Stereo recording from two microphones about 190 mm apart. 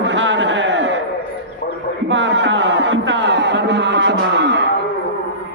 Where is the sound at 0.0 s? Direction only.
70° right (ahead or behind).